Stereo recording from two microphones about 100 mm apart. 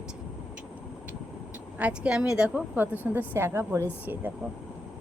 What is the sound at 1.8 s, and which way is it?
Speech, 10° right (ahead or behind).